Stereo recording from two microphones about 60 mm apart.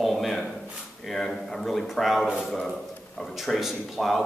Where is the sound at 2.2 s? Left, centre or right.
Centre.